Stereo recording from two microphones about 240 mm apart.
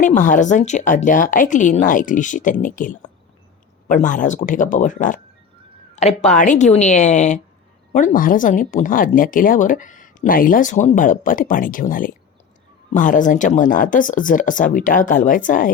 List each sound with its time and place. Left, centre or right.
0.0 s speech: left